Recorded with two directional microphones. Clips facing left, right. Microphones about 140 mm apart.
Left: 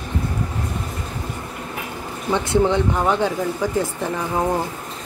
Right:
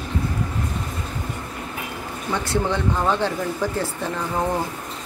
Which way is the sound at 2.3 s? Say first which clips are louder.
Left 6 dB; 20° left (ahead or behind).